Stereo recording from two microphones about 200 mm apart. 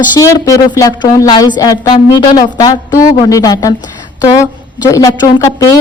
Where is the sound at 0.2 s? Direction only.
15° left (ahead or behind).